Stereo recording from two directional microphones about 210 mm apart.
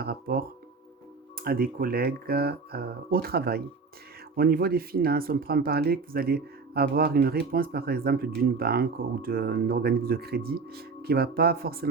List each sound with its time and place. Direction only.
0.0 s speech: 45° right (ahead or behind)